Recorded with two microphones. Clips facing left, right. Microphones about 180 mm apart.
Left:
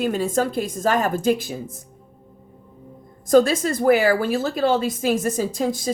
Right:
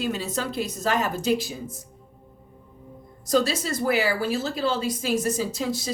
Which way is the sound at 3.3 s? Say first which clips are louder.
Left 7 dB; 50° left (ahead or behind).